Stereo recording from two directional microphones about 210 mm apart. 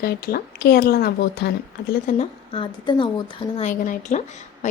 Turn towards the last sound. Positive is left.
turn(degrees=35)  # may be behind; listen again after turning